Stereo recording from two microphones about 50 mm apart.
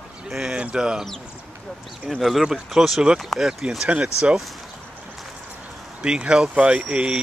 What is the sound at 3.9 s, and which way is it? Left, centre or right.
Speech, right.